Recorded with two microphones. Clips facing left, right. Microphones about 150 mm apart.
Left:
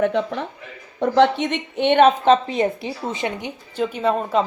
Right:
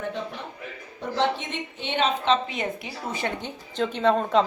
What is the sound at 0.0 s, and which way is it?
Speech, 85° left.